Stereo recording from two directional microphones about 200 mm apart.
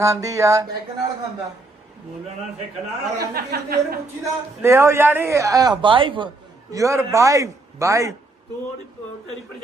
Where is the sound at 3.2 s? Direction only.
50° right (ahead or behind).